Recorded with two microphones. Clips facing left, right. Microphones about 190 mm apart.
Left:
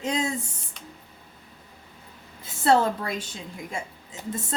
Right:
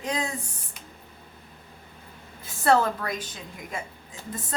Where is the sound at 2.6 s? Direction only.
25° left (ahead or behind).